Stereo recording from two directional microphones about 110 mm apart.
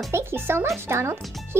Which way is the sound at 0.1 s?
20° right (ahead or behind).